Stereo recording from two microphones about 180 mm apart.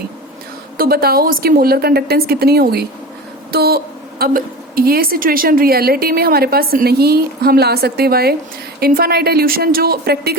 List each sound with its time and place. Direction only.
0.8 s a woman's voice: 55° right (ahead or behind)